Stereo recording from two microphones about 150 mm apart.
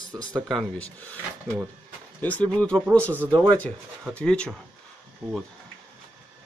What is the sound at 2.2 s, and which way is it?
Speech, 10° left (ahead or behind).